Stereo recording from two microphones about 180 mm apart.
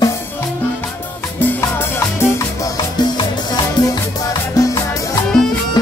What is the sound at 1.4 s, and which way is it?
Music, 15° left (ahead or behind).